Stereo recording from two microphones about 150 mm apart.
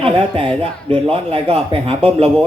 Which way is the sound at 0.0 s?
35° right (ahead or behind).